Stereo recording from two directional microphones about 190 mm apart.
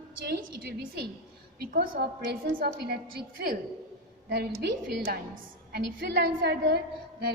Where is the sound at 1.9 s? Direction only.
80° right; by 3.0 s 60° right (ahead or behind).